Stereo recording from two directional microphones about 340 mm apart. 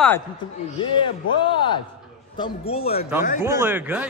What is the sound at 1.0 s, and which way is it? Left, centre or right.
A man's voice, centre.